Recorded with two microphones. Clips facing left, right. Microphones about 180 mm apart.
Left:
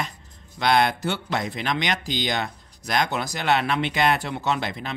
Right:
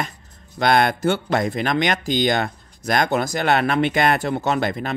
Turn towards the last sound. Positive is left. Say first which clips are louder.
# right 5 dB
turn(degrees=-50)  # may be behind; listen again after turning